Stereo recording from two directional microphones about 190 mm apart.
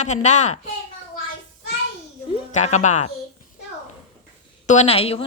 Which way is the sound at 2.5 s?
40° left (ahead or behind).